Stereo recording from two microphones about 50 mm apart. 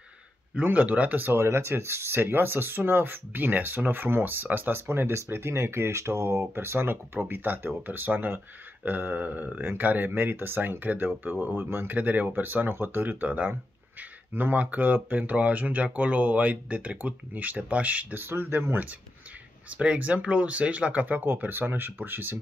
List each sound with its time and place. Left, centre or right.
0.7 s speech: right
1.3 s speech: right
6.5 s speech: right
11.9 s speech: right
18.1 s speech: right
19.7 s speech: right
21.5 s speech: right